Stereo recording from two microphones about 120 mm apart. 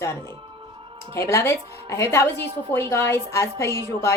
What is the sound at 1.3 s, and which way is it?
Speech, 20° left (ahead or behind).